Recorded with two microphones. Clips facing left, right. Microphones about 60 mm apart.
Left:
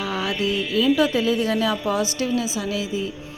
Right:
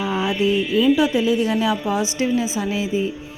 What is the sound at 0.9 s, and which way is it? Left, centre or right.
A woman's voice, centre.